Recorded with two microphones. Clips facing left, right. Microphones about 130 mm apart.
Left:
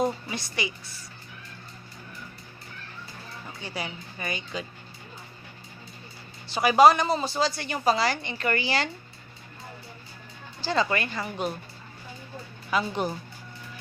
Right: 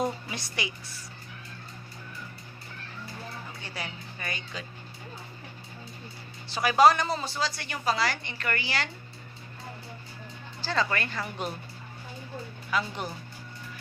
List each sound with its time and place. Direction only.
0.0 s a woman's voice: centre (ahead or behind)
3.6 s speech: 15° left (ahead or behind)
6.5 s a woman's voice: 15° left (ahead or behind)
10.8 s speech: 10° left (ahead or behind)
12.7 s a woman's voice: 25° left (ahead or behind)